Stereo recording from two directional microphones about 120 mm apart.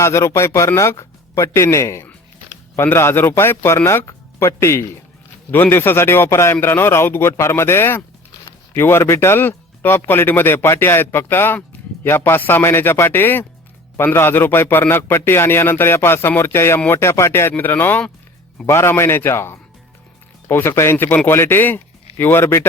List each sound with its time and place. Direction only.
0.0 s a man's voice: 25° left (ahead or behind)